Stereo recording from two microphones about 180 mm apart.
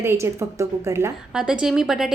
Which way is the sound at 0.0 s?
15° right (ahead or behind).